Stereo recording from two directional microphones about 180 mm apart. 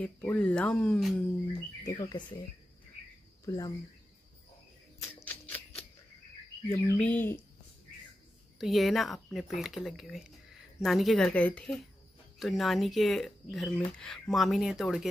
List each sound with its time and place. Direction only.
0.0 s speech: 10° left (ahead or behind)
1.9 s speech: 20° left (ahead or behind)
3.4 s speech: 20° left (ahead or behind)
4.9 s a sound: 10° left (ahead or behind)
6.7 s speech: 10° left (ahead or behind)
8.5 s speech: centre (ahead or behind)